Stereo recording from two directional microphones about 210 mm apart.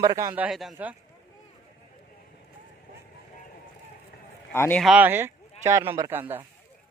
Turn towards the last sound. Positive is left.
turn(degrees=-10)  # may be behind; listen again after turning